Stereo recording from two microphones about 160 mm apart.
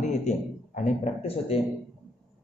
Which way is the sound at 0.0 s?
45° left (ahead or behind).